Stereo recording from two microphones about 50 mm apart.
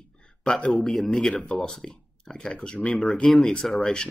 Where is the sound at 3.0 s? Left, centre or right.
Centre.